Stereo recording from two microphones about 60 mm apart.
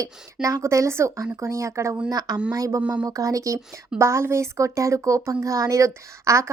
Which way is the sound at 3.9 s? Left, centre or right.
Right.